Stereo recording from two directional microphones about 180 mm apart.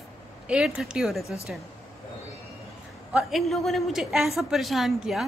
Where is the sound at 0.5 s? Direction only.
5° right (ahead or behind).